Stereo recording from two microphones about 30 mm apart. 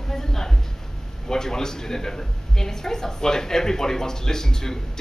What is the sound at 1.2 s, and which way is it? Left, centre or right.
A woman's voice, centre.